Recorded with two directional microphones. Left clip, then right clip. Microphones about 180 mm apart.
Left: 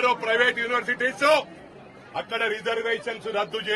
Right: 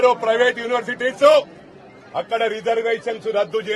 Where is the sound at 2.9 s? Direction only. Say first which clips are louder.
Right 6 dB; 15° right (ahead or behind).